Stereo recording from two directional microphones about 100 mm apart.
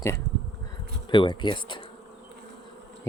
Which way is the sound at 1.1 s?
55° left (ahead or behind).